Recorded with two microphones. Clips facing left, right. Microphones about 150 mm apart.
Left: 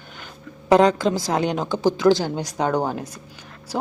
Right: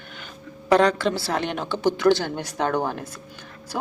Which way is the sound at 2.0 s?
10° left (ahead or behind).